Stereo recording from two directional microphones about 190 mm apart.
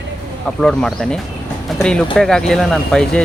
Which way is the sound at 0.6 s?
5° left (ahead or behind).